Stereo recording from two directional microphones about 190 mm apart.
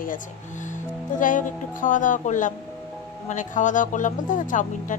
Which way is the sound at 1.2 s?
45° left (ahead or behind).